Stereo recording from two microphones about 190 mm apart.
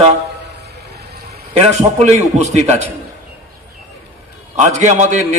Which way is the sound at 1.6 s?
35° right (ahead or behind).